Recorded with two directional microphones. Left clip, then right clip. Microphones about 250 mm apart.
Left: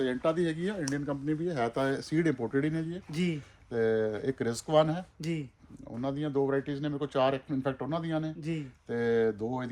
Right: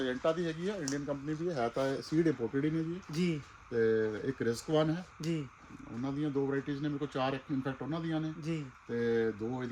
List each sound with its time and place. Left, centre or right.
0.0 s speech: left
2.5 s speech: centre
3.1 s speech: centre
3.7 s speech: centre